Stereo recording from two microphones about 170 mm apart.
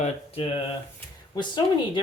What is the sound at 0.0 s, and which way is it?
Speech, 35° left (ahead or behind).